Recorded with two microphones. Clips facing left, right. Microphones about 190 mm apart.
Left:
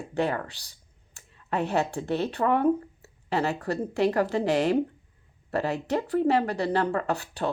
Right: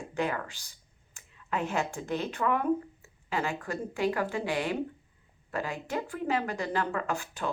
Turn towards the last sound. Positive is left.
turn(degrees=35)  # may be behind; listen again after turning